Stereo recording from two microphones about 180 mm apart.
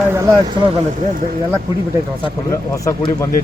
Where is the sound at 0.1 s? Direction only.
15° right (ahead or behind).